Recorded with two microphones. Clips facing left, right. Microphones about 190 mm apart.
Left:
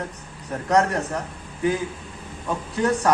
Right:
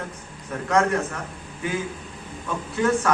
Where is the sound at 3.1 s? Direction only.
35° left (ahead or behind).